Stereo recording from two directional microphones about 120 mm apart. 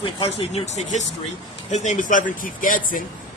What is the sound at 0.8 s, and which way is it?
Speech, 75° left (ahead or behind).